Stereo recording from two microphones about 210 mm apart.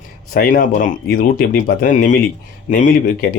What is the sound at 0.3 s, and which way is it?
Speech, 40° left (ahead or behind).